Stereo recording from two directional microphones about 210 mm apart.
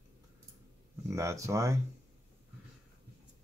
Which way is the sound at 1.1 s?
15° right (ahead or behind).